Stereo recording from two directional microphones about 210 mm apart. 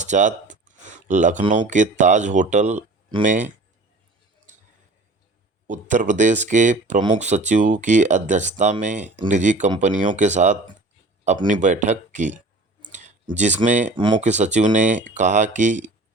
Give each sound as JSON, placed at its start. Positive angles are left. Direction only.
{"t": 0.0, "sound": "speech", "side_deg": -35}
{"t": 5.6, "sound": "speech", "side_deg": -35}
{"t": 12.9, "sound": "clicking", "side_deg": -35}
{"t": 13.3, "sound": "speech", "side_deg": -35}
{"t": 13.9, "sound": "speech", "side_deg": -20}
{"t": 14.2, "sound": "speech", "side_deg": -35}